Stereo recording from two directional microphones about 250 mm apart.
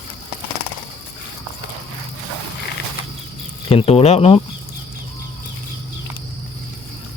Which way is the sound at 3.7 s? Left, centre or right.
Left.